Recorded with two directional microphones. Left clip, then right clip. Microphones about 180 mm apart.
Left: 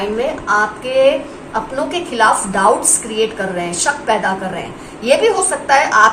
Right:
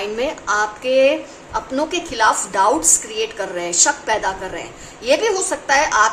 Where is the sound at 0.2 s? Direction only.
65° right (ahead or behind).